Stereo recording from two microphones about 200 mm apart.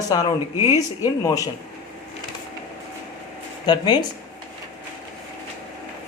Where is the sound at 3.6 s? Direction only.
20° left (ahead or behind).